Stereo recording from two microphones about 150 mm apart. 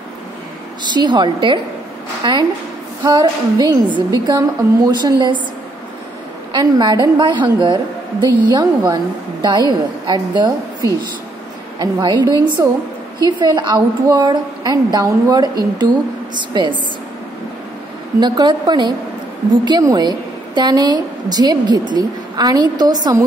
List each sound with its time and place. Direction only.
0.9 s a woman's voice: 30° right (ahead or behind)
6.5 s a woman's voice: 30° right (ahead or behind)
18.2 s a woman's voice: 30° right (ahead or behind)